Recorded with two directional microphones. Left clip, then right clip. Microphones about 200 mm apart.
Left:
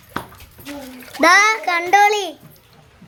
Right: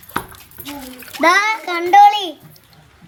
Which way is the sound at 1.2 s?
60° left (ahead or behind).